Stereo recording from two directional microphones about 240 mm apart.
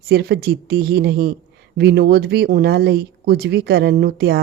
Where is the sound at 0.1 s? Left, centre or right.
Right.